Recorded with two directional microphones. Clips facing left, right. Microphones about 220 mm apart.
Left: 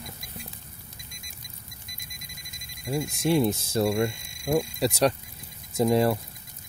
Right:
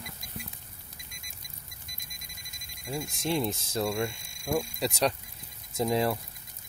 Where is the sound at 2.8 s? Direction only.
20° left (ahead or behind).